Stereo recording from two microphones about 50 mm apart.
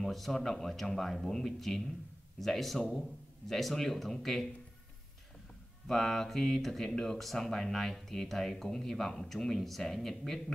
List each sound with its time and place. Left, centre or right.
0.0 s speech: centre
5.9 s speech: centre